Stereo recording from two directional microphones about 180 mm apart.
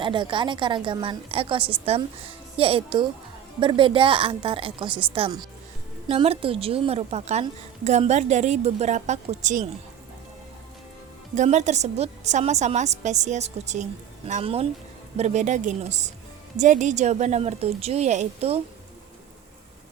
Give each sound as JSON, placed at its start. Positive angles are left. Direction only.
{"t": 0.0, "sound": "a woman's voice", "side_deg": -25}
{"t": 11.3, "sound": "a woman's voice", "side_deg": -40}